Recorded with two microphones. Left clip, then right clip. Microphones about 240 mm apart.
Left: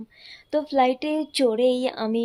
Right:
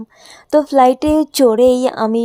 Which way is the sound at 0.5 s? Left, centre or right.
Right.